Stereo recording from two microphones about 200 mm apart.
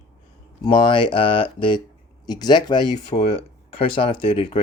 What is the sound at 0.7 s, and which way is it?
Speech, 20° left (ahead or behind).